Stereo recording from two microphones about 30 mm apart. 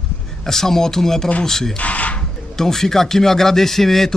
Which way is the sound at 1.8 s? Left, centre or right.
Left.